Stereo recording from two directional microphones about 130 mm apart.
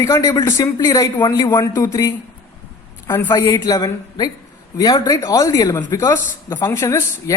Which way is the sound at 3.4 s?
30° left (ahead or behind).